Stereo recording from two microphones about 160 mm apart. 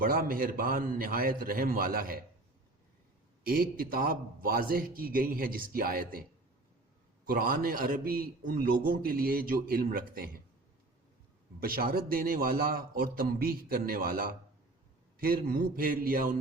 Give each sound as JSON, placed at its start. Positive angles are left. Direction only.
{"t": 0.0, "sound": "a man's voice", "side_deg": -65}
{"t": 3.4, "sound": "a man's voice", "side_deg": -65}
{"t": 7.3, "sound": "a man's voice", "side_deg": -65}
{"t": 11.6, "sound": "a man's voice", "side_deg": -65}